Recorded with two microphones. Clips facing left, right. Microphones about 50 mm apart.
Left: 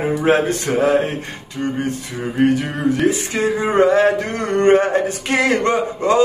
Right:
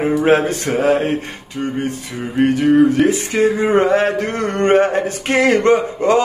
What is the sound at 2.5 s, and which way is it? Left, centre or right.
Speech, right.